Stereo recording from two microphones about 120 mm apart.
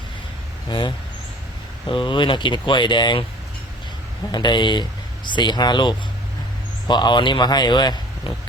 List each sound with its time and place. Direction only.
0.7 s speech: 40° left (ahead or behind)
4.3 s speech: 40° left (ahead or behind)